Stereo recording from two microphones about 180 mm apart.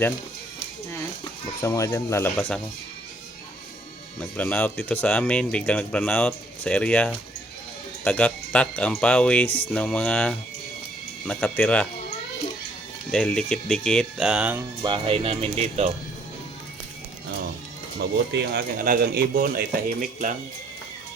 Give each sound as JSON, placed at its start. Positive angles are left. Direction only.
{"t": 1.6, "sound": "speech", "side_deg": 15}
{"t": 4.2, "sound": "speech", "side_deg": 10}
{"t": 13.1, "sound": "speech", "side_deg": 5}
{"t": 14.8, "sound": "speech", "side_deg": -30}
{"t": 18.3, "sound": "speech", "side_deg": -70}
{"t": 18.8, "sound": "speech", "side_deg": -50}